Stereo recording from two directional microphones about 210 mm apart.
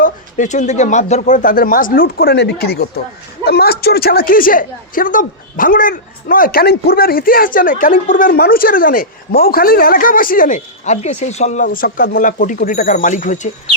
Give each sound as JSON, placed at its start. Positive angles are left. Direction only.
{"t": 0.0, "sound": "a woman's voice", "side_deg": 35}